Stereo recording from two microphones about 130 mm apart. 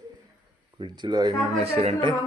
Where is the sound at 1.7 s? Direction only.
50° right (ahead or behind).